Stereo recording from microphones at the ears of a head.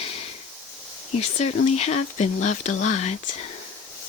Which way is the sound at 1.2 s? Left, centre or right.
Left.